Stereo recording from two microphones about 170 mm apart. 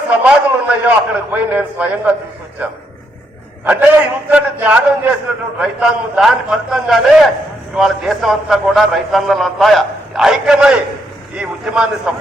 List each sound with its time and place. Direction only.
0.1 s a man's voice: 10° right (ahead or behind)
3.7 s a man's voice: 10° right (ahead or behind)